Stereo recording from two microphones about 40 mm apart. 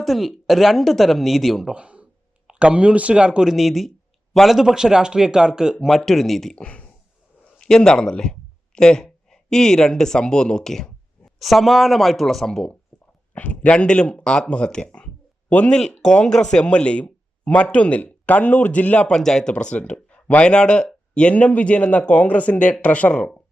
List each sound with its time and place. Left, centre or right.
0.0 s speech: centre
1.6 s speech: right
3.4 s speech: centre
6.1 s speech: centre
6.6 s speech: left
7.6 s speech: centre
11.3 s speech: centre
12.5 s speech: centre
13.3 s speech: left; by 16.6 s centre
16.6 s speech: left
19.1 s speech: centre
19.7 s speech: left